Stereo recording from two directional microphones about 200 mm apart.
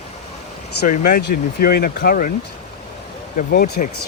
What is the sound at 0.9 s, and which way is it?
Speech, 50° left (ahead or behind).